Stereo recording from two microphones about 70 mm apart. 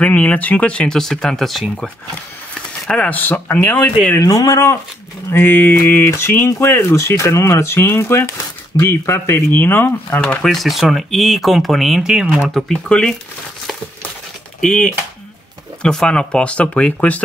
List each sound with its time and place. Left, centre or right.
0.0 s speech: left; by 1.7 s centre
2.9 s speech: left
4.2 s speech: left
5.3 s speech: left
10.4 s speech: centre
12.4 s speech: centre
14.6 s speech: centre